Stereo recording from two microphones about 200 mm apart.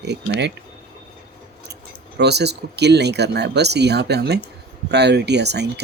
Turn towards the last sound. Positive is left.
turn(degrees=-55)  # may be behind; listen again after turning